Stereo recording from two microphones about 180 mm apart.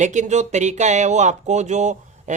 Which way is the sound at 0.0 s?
40° right (ahead or behind).